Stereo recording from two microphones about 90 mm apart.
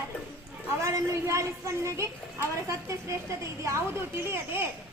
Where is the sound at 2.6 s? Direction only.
35° right (ahead or behind).